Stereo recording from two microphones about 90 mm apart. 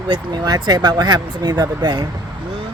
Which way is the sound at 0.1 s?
55° right (ahead or behind).